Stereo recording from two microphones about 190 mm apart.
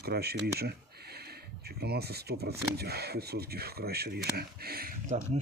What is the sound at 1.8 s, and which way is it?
Speech, 60° right (ahead or behind).